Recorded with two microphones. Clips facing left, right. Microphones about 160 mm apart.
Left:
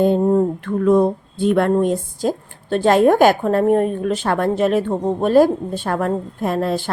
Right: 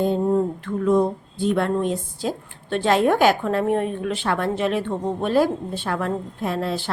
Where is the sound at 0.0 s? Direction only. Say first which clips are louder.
Left 5 dB; 55° left (ahead or behind).